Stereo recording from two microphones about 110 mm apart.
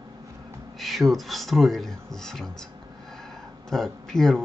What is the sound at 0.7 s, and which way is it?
Speech, centre (ahead or behind).